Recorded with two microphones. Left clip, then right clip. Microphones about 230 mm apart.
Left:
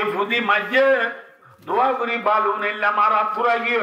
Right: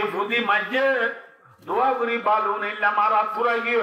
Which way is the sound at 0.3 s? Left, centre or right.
Left.